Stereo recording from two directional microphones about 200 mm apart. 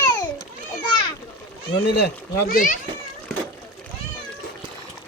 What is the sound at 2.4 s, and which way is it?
Speech, 45° left (ahead or behind).